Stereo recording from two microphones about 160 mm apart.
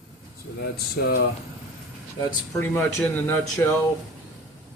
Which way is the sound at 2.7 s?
15° left (ahead or behind).